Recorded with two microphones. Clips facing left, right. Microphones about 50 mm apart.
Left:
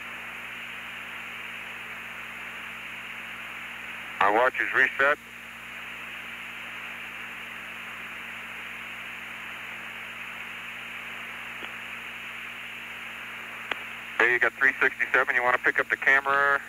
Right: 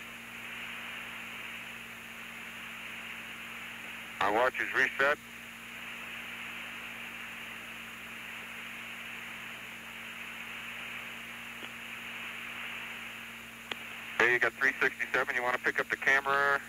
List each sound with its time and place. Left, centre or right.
4.2 s speech: left
14.1 s speech: centre